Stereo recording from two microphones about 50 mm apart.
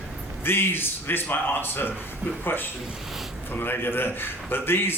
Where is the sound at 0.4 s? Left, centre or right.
Left.